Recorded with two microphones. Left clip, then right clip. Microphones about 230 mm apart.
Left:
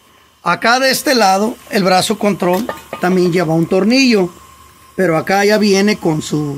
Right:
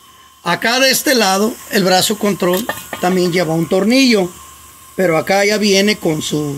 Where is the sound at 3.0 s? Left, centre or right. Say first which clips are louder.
Left 1 dB; left.